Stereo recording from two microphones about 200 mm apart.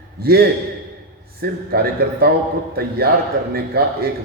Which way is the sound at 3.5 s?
50° right (ahead or behind).